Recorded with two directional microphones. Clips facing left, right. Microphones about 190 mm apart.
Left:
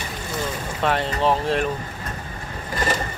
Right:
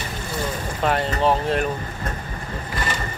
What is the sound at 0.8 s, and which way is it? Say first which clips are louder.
Speech: right 1 dB; centre (ahead or behind).